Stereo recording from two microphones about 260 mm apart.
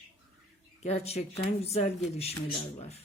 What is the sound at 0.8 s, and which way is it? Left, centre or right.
Speech, left.